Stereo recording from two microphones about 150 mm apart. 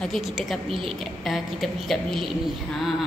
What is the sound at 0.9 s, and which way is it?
A woman's voice, centre (ahead or behind).